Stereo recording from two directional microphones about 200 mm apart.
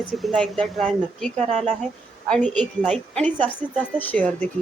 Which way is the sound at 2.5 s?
Centre (ahead or behind).